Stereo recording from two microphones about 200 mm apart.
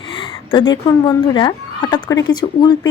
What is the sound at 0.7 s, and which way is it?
Speech, 20° left (ahead or behind).